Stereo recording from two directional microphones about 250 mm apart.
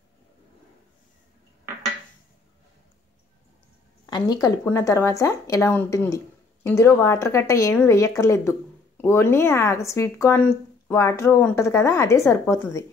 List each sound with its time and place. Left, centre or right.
4.0 s speech: centre